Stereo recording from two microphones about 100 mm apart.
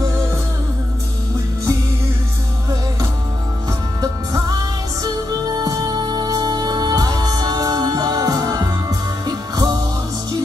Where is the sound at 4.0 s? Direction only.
40° right (ahead or behind).